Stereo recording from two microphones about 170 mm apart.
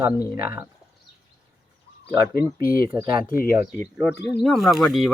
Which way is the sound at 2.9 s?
25° right (ahead or behind).